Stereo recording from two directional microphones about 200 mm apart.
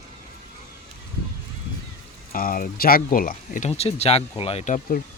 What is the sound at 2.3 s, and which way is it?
Speech, 45° left (ahead or behind).